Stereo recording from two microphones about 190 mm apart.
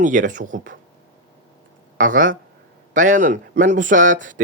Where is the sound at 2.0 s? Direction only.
45° right (ahead or behind).